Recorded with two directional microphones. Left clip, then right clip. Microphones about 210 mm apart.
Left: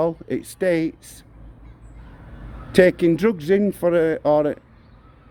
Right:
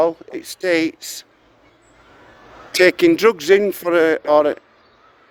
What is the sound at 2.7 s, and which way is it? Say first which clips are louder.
Speech: right 2 dB; 20° right (ahead or behind).